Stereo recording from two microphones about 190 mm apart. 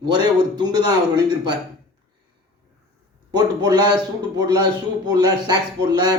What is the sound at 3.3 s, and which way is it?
A man's voice, 20° right (ahead or behind).